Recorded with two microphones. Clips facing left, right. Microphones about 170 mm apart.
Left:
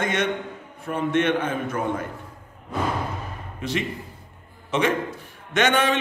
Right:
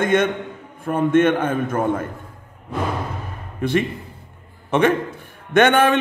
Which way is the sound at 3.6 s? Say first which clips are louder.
Right 7 dB; 55° right (ahead or behind).